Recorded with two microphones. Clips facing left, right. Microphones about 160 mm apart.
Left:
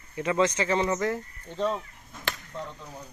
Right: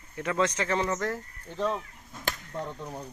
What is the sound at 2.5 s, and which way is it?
Speech, 15° right (ahead or behind).